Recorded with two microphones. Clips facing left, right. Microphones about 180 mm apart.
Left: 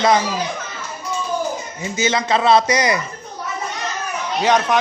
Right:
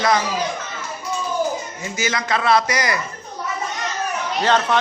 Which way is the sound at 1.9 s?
25° left (ahead or behind).